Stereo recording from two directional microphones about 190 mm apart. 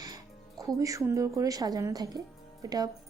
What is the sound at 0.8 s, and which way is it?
Speech, 15° right (ahead or behind).